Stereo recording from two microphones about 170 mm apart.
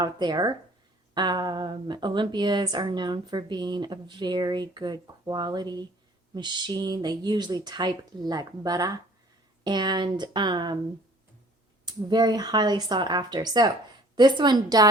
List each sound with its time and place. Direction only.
0.0 s a woman's voice: 25° right (ahead or behind)
11.9 s a woman's voice: 25° right (ahead or behind)